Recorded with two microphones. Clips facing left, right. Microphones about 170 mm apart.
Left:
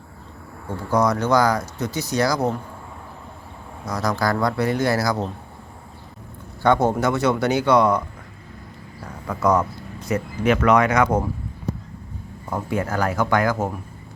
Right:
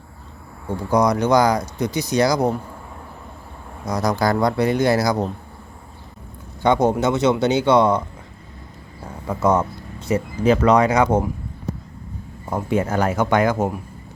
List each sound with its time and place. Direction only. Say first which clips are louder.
0.9 s speech: right 2 dB; 15° right (ahead or behind)
3.8 s speech: right 3 dB; 20° right (ahead or behind)
6.6 s speech: right 1 dB; 20° right (ahead or behind)
9.2 s speech: right 1 dB; 25° right (ahead or behind)
12.5 s speech: right 3 dB; 20° right (ahead or behind)